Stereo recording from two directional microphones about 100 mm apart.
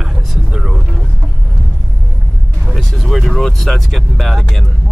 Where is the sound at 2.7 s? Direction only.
5° left (ahead or behind).